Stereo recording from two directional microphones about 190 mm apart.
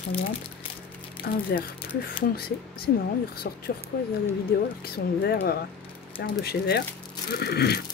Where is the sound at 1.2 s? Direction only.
50° left (ahead or behind).